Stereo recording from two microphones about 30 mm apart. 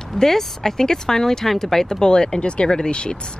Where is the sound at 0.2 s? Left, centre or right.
Centre.